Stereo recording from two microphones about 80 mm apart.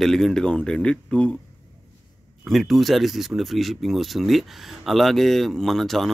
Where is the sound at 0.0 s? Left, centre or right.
Centre.